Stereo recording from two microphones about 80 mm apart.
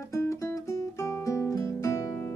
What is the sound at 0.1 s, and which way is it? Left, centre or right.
Music, left.